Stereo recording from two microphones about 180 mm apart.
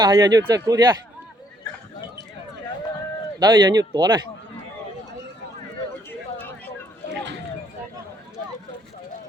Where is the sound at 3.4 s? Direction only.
20° right (ahead or behind).